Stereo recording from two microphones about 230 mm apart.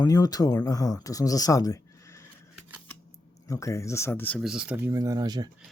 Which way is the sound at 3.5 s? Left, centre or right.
Centre.